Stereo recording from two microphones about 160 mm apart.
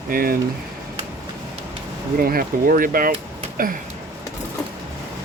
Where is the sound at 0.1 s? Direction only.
65° right (ahead or behind).